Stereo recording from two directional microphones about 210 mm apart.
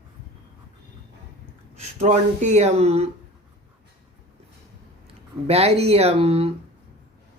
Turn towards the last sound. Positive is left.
turn(degrees=-30)  # may be behind; listen again after turning